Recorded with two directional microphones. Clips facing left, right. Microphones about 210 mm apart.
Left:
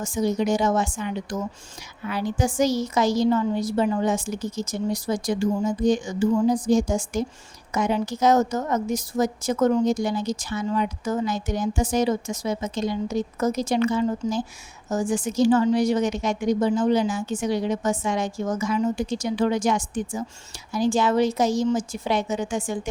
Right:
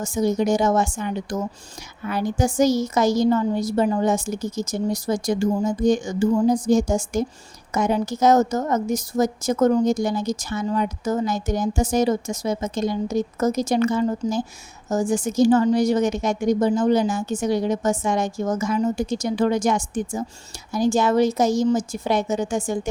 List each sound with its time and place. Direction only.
0.0 s a woman's voice: 45° right (ahead or behind)